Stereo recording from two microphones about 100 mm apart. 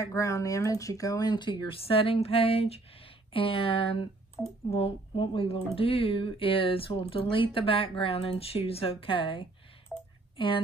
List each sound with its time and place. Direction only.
0.0 s speech: 30° left (ahead or behind); by 4.1 s 65° left (ahead or behind)
4.6 s speech: 75° left (ahead or behind)
9.9 s a sound: 5° left (ahead or behind)
10.3 s speech: 60° left (ahead or behind)